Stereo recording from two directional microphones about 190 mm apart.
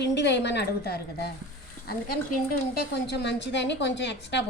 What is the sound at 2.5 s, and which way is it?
A woman's voice, 60° left (ahead or behind).